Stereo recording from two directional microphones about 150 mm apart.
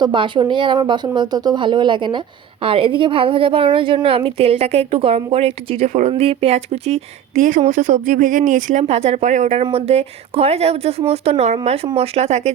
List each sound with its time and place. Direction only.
0.0 s a woman's voice: 35° right (ahead or behind); by 8.8 s 55° right (ahead or behind)
8.8 s speech: 45° right (ahead or behind)